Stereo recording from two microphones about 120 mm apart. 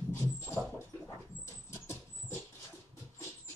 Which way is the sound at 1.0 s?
20° left (ahead or behind).